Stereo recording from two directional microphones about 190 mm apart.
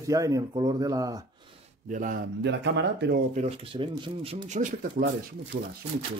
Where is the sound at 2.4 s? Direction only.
65° right (ahead or behind).